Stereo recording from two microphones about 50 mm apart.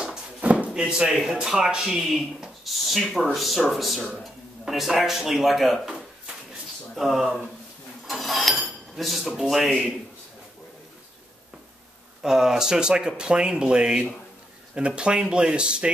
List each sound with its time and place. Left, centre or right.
0.4 s drawer open or close: right
0.7 s speech: centre
2.6 s speech: centre
7.0 s speech: centre
8.1 s dishes: centre
9.4 s speech: centre
12.2 s speech: centre